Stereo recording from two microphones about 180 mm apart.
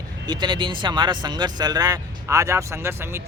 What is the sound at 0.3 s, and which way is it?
Speech, 25° right (ahead or behind).